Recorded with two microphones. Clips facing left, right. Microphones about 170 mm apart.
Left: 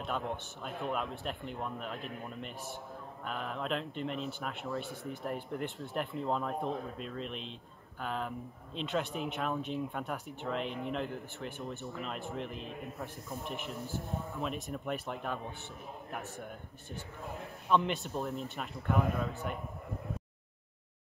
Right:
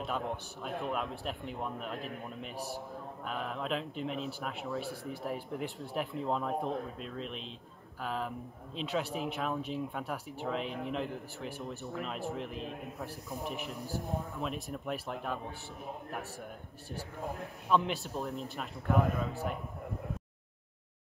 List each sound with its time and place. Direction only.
0.0 s speech: centre (ahead or behind)
2.5 s a man's voice: 35° right (ahead or behind)
3.3 s speech: centre (ahead or behind)
17.6 s speech: centre (ahead or behind)